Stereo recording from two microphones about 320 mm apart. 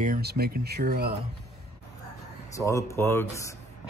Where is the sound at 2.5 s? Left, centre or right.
Centre.